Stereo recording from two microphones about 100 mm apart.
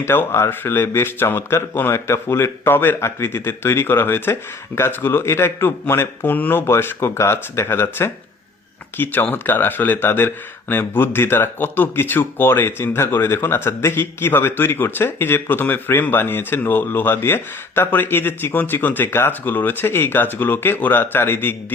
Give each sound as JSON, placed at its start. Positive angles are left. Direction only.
{"t": 0.0, "sound": "speech", "side_deg": 20}